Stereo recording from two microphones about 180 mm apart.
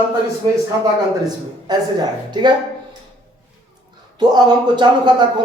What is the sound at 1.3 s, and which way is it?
A man's voice, 25° right (ahead or behind).